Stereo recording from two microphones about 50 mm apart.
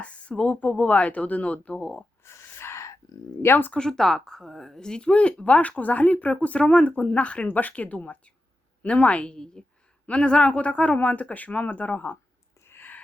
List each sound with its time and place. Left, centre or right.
0.0 s speech: left
2.2 s gasp: left
3.4 s speech: left
3.8 s speech: centre; by 12.0 s left
12.6 s a sound: left